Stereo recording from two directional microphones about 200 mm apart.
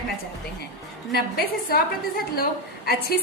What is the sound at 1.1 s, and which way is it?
Speech, 50° left (ahead or behind).